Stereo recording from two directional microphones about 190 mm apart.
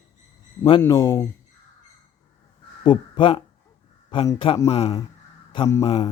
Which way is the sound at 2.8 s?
25° left (ahead or behind).